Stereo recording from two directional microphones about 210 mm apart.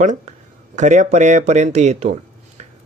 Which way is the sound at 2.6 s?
35° right (ahead or behind).